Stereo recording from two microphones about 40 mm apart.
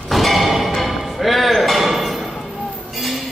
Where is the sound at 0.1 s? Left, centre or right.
Centre.